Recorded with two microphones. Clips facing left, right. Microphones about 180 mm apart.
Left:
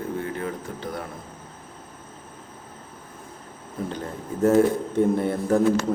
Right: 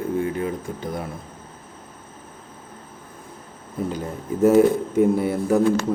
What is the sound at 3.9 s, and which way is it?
A man's voice, 10° right (ahead or behind).